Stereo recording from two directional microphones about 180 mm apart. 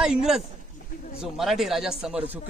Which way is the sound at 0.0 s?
5° right (ahead or behind).